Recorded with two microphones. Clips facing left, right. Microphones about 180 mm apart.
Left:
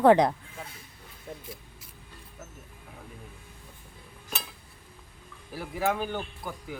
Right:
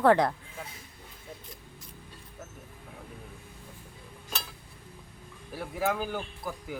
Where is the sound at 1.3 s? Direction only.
55° left (ahead or behind).